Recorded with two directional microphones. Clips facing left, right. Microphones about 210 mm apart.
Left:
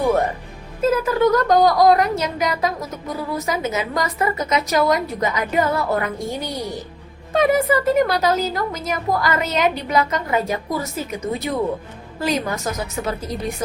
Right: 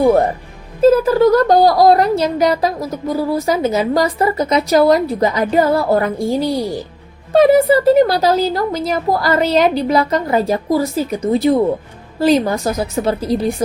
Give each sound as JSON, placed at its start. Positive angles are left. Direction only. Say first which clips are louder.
{"t": 0.8, "sound": "speech", "louder": "right 7 dB", "side_deg": -30}
{"t": 7.3, "sound": "speech", "louder": "right 7 dB", "side_deg": -35}